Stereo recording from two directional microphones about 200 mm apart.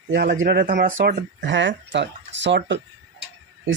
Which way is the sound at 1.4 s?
65° right (ahead or behind).